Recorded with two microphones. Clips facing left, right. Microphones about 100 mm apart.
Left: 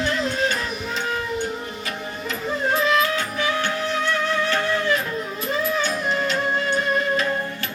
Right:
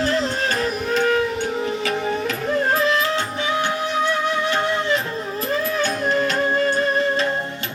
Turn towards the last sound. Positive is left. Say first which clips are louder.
# right 3 dB
turn(degrees=-45)  # may be behind; listen again after turning